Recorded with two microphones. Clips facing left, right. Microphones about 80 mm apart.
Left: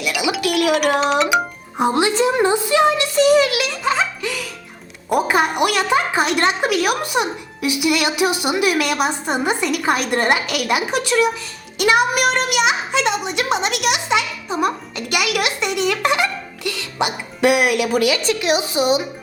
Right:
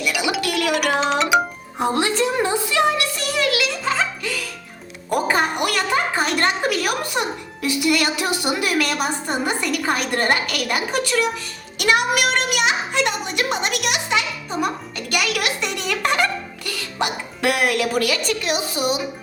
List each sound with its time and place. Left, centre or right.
0.2 s music: centre
0.7 s music: centre
1.8 s music: centre
5.0 s a woman's voice: centre
14.1 s music: centre
17.0 s a woman's voice: centre